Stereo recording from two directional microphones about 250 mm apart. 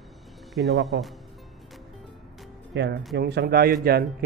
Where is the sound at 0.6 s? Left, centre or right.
Centre.